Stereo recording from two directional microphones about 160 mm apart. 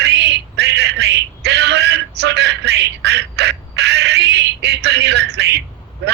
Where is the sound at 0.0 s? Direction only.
90° right.